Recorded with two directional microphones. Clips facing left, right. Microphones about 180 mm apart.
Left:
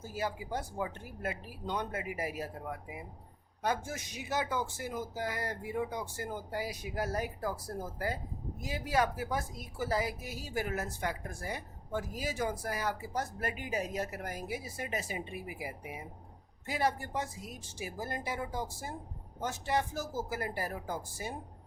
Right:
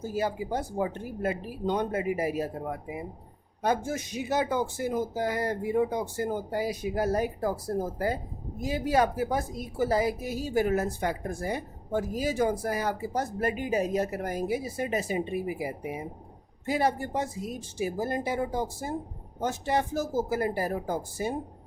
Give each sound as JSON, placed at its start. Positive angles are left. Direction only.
{"t": 0.1, "sound": "a woman's voice", "side_deg": -25}